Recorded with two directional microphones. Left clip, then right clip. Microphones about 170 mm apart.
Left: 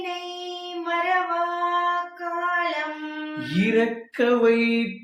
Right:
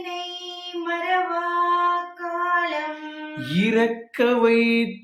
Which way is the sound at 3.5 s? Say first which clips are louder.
Right 1 dB; 25° right (ahead or behind).